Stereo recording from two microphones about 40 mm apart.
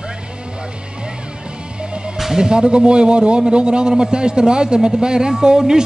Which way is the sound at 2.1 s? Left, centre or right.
Centre.